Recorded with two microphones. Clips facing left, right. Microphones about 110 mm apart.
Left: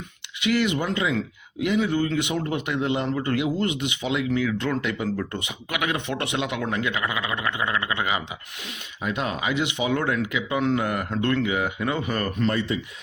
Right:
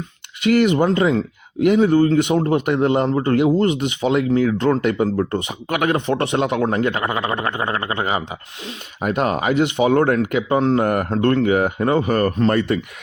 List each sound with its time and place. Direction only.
0.4 s speech: 45° right (ahead or behind)
9.0 s speech: 50° right (ahead or behind)